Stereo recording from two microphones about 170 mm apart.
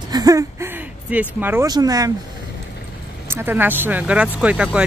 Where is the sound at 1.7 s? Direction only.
20° right (ahead or behind).